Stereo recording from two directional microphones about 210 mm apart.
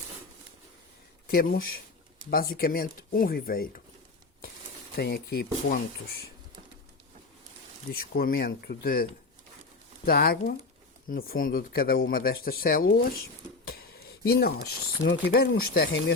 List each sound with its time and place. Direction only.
1.3 s speech: 45° left (ahead or behind)
4.9 s speech: 50° left (ahead or behind)
7.9 s speech: 45° left (ahead or behind)
10.1 s speech: 45° left (ahead or behind)